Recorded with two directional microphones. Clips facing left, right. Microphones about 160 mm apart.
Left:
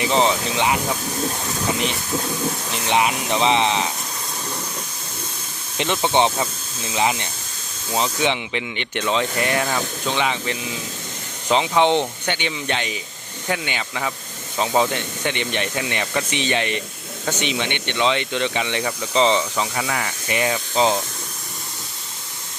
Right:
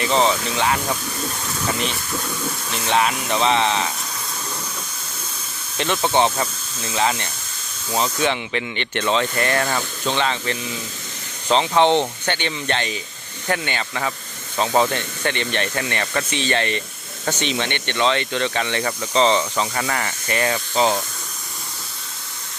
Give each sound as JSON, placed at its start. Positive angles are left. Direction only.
{"t": 0.0, "sound": "speech", "side_deg": 15}
{"t": 2.8, "sound": "speech", "side_deg": 15}
{"t": 5.7, "sound": "speech", "side_deg": 20}
{"t": 6.0, "sound": "speech", "side_deg": -5}
{"t": 6.9, "sound": "speech", "side_deg": 15}